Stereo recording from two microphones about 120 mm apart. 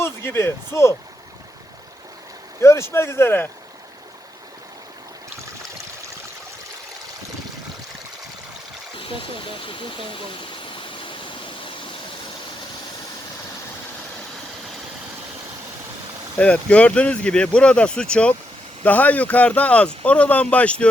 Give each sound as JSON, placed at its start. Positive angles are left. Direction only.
{"t": 0.0, "sound": "speech", "side_deg": 20}
{"t": 2.6, "sound": "speech", "side_deg": 25}
{"t": 9.0, "sound": "a sound", "side_deg": 45}
{"t": 16.4, "sound": "speech", "side_deg": 10}